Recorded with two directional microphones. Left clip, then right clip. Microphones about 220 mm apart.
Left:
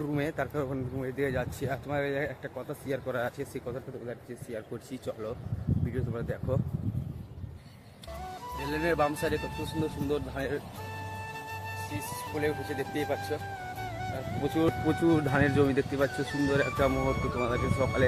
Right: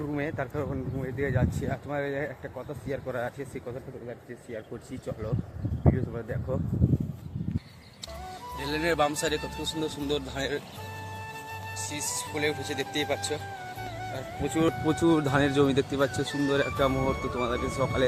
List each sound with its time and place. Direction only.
0.1 s speech: 10° left (ahead or behind)
6.1 s speech: centre (ahead or behind)
8.5 s speech: centre (ahead or behind)
11.8 s speech: centre (ahead or behind)
15.3 s speech: 15° right (ahead or behind)
16.0 s speech: centre (ahead or behind)